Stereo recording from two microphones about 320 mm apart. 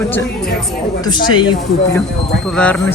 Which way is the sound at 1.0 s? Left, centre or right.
Centre.